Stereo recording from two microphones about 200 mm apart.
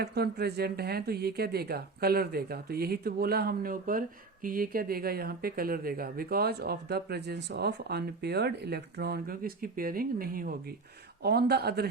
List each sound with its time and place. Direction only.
0.0 s speech: 55° right (ahead or behind)